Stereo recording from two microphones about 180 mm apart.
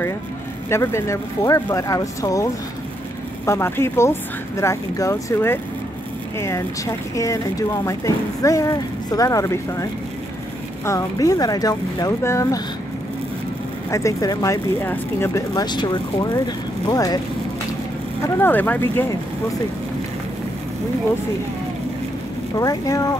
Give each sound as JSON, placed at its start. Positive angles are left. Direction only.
{"t": 0.7, "sound": "speech", "side_deg": 15}
{"t": 10.9, "sound": "speech", "side_deg": 20}
{"t": 13.8, "sound": "speech", "side_deg": 15}
{"t": 18.2, "sound": "speech", "side_deg": 10}
{"t": 22.6, "sound": "speech", "side_deg": 20}